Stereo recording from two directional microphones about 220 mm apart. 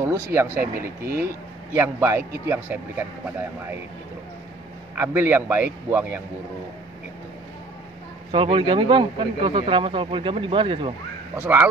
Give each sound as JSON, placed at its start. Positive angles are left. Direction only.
{"t": 0.6, "sound": "speech", "side_deg": -10}
{"t": 4.9, "sound": "speech", "side_deg": -10}
{"t": 8.3, "sound": "speech", "side_deg": -25}
{"t": 11.3, "sound": "speech", "side_deg": -5}